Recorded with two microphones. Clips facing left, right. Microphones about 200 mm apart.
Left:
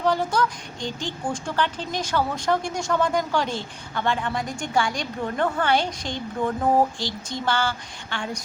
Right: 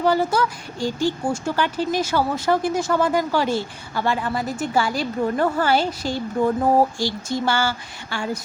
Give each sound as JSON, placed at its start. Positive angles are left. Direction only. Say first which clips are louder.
{"t": 0.0, "sound": "speech", "louder": "right 3 dB", "side_deg": -5}